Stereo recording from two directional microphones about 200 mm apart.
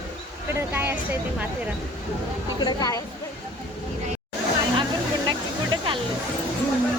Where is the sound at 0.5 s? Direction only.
10° right (ahead or behind).